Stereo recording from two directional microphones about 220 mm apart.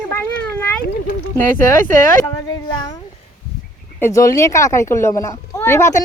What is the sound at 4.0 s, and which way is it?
Speech, 15° left (ahead or behind).